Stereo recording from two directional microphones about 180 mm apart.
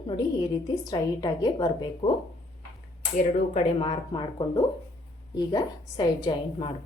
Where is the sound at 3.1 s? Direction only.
45° left (ahead or behind).